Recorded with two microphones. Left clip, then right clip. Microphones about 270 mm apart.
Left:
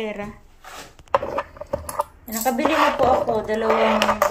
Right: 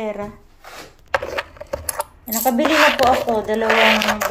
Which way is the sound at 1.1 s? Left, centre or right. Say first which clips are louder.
Even; right.